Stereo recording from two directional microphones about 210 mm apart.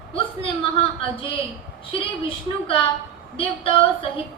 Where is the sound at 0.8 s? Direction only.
25° left (ahead or behind).